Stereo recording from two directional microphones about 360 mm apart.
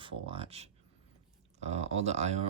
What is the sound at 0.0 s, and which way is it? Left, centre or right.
Speech, centre.